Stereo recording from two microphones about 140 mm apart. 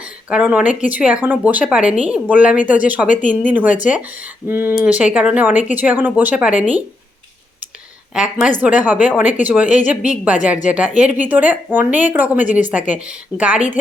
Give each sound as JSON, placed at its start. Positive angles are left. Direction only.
{"t": 0.3, "sound": "a woman's voice", "side_deg": -10}
{"t": 3.2, "sound": "speech", "side_deg": 65}
{"t": 3.5, "sound": "a woman's voice", "side_deg": -10}
{"t": 8.1, "sound": "a woman's voice", "side_deg": -5}